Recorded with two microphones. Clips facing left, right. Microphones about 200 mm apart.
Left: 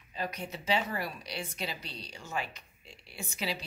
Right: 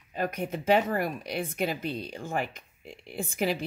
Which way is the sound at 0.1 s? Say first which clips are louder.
Right 7 dB; 50° right (ahead or behind).